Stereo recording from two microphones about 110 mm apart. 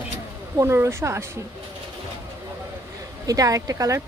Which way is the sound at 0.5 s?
25° right (ahead or behind).